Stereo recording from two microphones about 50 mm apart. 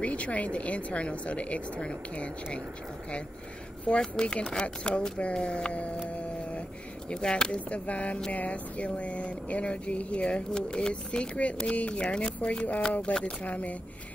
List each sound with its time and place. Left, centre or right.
0.0 s speech: left
3.9 s speech: centre
7.1 s speech: centre
7.7 s speech: left